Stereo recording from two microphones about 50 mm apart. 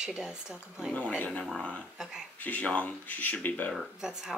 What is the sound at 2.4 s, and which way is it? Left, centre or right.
Speech, left.